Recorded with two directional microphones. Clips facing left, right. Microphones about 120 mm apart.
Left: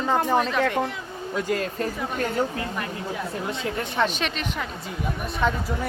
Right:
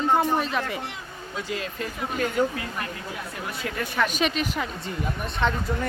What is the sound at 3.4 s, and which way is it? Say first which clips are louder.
Speech: left 3 dB; 25° left (ahead or behind).